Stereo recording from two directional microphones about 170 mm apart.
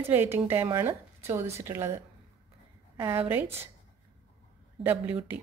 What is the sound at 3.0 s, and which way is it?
Speech, 15° right (ahead or behind).